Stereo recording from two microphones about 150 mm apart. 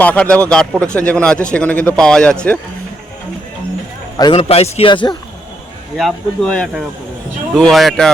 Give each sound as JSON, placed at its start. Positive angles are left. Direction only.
{"t": 0.0, "sound": "a man's voice", "side_deg": 10}
{"t": 4.4, "sound": "a man's voice", "side_deg": 45}
{"t": 6.0, "sound": "speech", "side_deg": 0}